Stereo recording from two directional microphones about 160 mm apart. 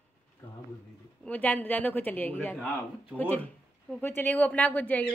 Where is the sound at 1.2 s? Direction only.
10° left (ahead or behind).